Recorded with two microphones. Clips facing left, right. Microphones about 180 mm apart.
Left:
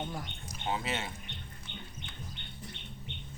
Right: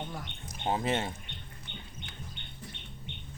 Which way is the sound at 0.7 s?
45° right (ahead or behind).